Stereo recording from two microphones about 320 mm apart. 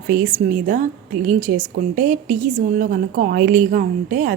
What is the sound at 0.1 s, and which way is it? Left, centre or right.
A woman's voice, right.